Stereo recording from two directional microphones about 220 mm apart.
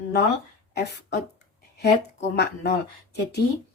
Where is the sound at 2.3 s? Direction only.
50° left (ahead or behind).